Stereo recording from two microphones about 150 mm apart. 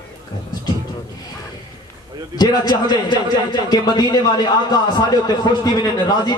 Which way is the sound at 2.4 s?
25° left (ahead or behind).